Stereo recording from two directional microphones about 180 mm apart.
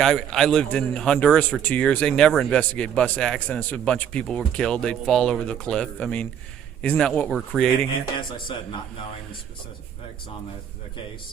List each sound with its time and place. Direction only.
0.0 s speech: centre (ahead or behind)
7.9 s speech: 25° left (ahead or behind)